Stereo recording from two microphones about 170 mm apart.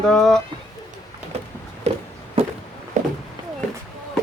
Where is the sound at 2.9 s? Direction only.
45° right (ahead or behind).